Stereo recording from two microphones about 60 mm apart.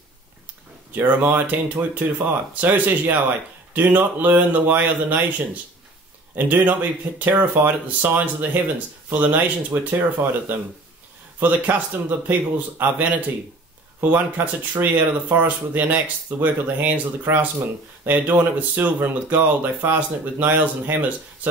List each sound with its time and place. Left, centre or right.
0.9 s speech: right
9.7 s speech: right
11.3 s speech: right